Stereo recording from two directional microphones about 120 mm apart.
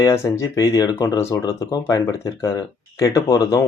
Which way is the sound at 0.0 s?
25° left (ahead or behind).